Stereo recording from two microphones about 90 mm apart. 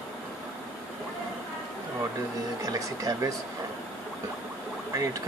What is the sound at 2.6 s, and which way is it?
Speech, 40° right (ahead or behind).